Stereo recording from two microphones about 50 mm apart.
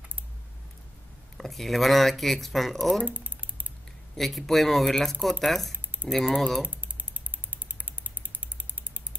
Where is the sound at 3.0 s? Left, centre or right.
Right.